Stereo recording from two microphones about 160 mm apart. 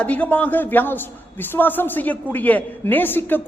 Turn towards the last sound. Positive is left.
turn(degrees=10)  # may be behind; listen again after turning